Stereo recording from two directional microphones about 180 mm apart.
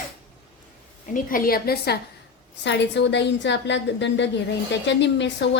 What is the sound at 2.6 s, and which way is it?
A woman's voice, 75° left (ahead or behind).